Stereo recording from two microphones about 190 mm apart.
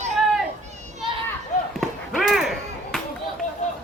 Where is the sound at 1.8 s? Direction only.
Centre (ahead or behind).